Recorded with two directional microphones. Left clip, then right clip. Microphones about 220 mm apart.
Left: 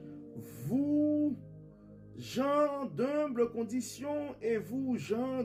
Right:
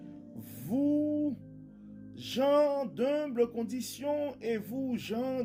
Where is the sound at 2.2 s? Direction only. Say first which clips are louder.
Right 4 dB; 50° right (ahead or behind).